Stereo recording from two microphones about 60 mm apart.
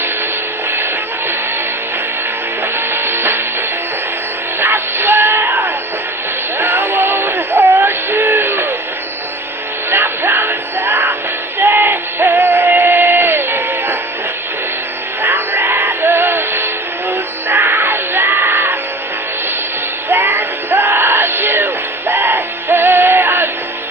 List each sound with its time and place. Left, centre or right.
2.9 s music: right
4.6 s music: right
7.2 s wail: right
7.7 s music: right
9.8 s music: right
15.2 s music: right
20.1 s a sound: right